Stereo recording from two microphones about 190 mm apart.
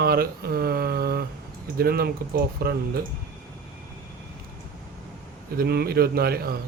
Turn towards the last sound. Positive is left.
turn(degrees=-55)  # may be behind; listen again after turning